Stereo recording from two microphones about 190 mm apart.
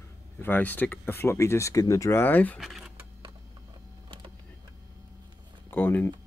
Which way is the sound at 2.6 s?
Centre (ahead or behind).